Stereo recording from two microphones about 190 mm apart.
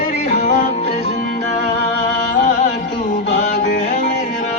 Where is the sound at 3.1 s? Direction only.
40° left (ahead or behind).